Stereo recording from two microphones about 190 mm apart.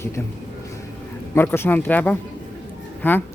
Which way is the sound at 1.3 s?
10° left (ahead or behind).